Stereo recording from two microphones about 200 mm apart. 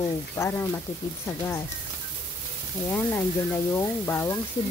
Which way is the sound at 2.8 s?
10° left (ahead or behind).